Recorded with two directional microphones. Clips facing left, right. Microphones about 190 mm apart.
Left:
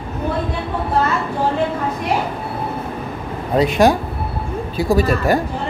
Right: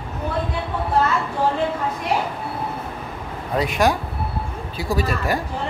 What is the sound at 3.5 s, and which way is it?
Speech, 25° left (ahead or behind).